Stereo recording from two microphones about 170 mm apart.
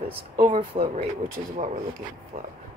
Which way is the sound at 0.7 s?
35° right (ahead or behind).